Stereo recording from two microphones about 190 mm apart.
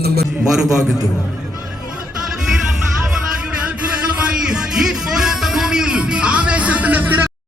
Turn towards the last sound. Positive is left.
turn(degrees=-10)  # may be behind; listen again after turning